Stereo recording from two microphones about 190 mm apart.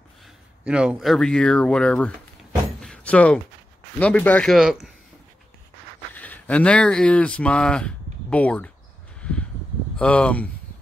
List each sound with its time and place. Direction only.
0.2 s speech: 5° right (ahead or behind)
2.8 s door: 5° left (ahead or behind)
4.0 s speech: 5° left (ahead or behind)
6.1 s speech: 10° left (ahead or behind)
9.9 s speech: 5° left (ahead or behind)